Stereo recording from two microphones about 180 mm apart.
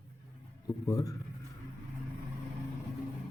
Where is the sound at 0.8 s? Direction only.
20° left (ahead or behind).